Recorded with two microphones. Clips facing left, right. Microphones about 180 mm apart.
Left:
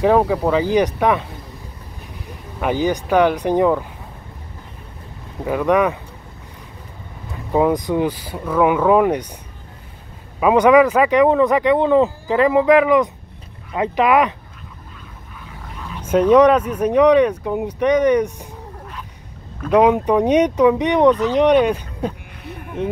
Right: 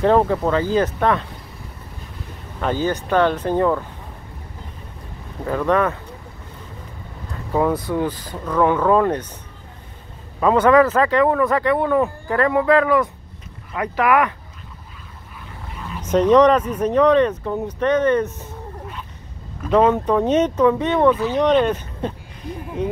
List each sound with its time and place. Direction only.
0.0 s speech: 10° left (ahead or behind)
2.6 s speech: 15° left (ahead or behind)
5.4 s speech: 10° left (ahead or behind)
7.5 s speech: 15° left (ahead or behind)
10.4 s speech: 15° left (ahead or behind)
15.7 s dog: centre (ahead or behind)
16.0 s speech: 10° left (ahead or behind)
19.7 s speech: 10° left (ahead or behind)